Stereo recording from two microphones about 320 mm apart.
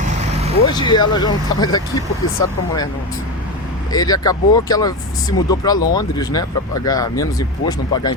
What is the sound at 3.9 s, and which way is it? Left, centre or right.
Speech, centre.